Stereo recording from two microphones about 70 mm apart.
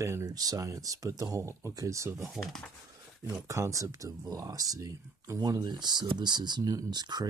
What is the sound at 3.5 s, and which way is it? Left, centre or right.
Speech, right.